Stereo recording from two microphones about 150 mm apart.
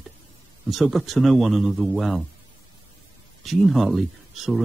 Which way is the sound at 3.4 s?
Centre (ahead or behind).